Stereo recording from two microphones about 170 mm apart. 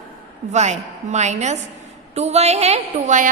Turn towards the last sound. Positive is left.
turn(degrees=-45)  # may be behind; listen again after turning